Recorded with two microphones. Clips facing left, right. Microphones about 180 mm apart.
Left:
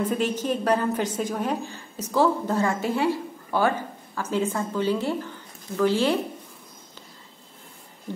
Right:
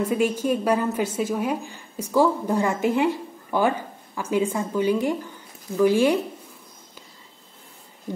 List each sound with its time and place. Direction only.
0.0 s a woman's voice: 10° right (ahead or behind)